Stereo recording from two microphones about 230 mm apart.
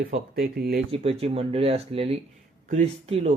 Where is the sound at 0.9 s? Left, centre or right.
Right.